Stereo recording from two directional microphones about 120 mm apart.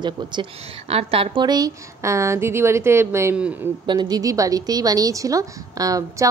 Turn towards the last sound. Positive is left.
turn(degrees=-30)  # may be behind; listen again after turning